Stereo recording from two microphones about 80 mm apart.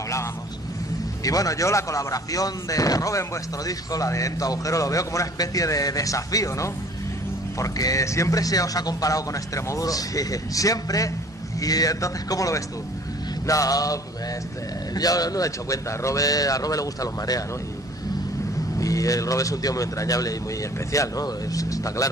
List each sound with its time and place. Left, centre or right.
1.2 s speech: left
15.0 s speech: left
18.8 s speech: left